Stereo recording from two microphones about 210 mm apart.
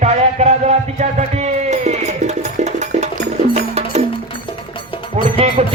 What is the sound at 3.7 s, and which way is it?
Music, 30° right (ahead or behind).